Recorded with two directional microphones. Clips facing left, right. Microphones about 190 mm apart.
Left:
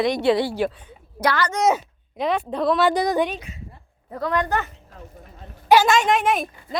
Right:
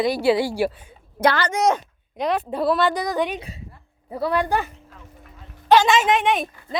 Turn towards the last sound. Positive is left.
turn(degrees=0)  # may be behind; listen again after turning